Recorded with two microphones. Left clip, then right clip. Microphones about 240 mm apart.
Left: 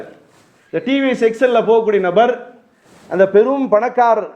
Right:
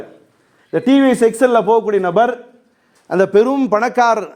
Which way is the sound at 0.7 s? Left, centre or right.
Right.